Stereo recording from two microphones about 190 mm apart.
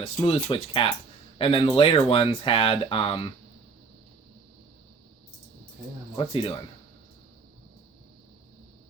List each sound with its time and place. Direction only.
0.0 s speech: 30° left (ahead or behind)
6.1 s speech: 30° left (ahead or behind)